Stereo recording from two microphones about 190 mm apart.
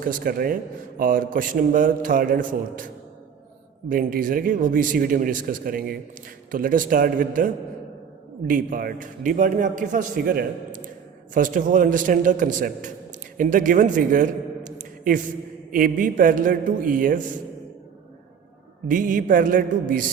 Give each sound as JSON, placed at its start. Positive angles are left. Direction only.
{"t": 0.0, "sound": "a man's voice", "side_deg": -50}
{"t": 18.9, "sound": "speech", "side_deg": -45}